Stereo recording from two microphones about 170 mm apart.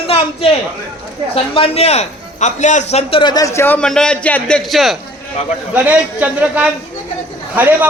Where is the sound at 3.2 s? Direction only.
20° left (ahead or behind).